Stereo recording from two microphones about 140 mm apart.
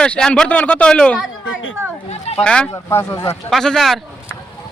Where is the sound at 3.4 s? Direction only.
5° left (ahead or behind).